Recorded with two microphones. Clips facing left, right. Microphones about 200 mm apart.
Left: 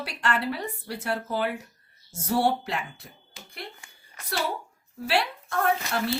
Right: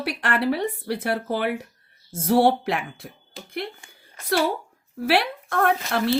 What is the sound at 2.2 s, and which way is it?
Speech, 60° right (ahead or behind).